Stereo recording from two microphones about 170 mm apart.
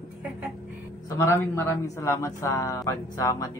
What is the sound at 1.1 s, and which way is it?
Speech, 15° left (ahead or behind).